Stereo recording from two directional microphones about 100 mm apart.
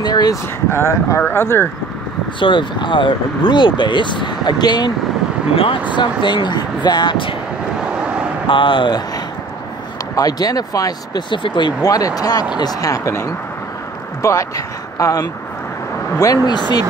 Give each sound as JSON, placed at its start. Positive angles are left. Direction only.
{"t": 0.0, "sound": "speech", "side_deg": 40}
{"t": 0.7, "sound": "speech", "side_deg": 25}
{"t": 2.4, "sound": "speech", "side_deg": 55}
{"t": 5.9, "sound": "speech", "side_deg": 50}
{"t": 7.8, "sound": "vehicle", "side_deg": -10}
{"t": 8.5, "sound": "speech", "side_deg": 55}
{"t": 11.8, "sound": "speech", "side_deg": 35}